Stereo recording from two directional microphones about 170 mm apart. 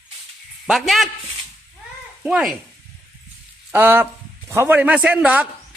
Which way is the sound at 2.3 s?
5° right (ahead or behind).